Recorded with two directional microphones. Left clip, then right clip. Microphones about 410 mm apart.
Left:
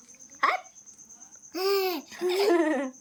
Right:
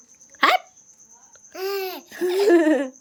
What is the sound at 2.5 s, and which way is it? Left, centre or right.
Speech, right.